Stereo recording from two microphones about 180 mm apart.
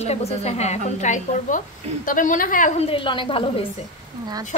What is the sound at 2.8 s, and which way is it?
Speech, 30° left (ahead or behind).